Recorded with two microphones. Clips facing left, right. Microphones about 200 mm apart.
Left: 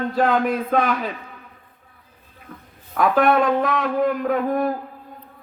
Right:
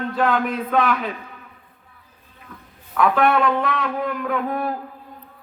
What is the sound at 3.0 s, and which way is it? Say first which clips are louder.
A man's voice: left 1 dB; 45° left (ahead or behind).